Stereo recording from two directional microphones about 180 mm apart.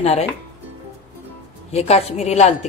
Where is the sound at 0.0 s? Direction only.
35° left (ahead or behind).